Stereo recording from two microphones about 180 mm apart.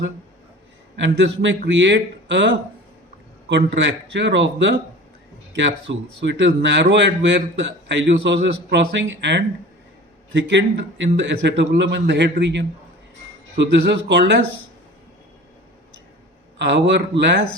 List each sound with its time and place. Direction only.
0.9 s a man's voice: 80° right
3.5 s a man's voice: 75° right (ahead or behind)
13.8 s speech: 70° right (ahead or behind)
16.6 s speech: 75° right (ahead or behind)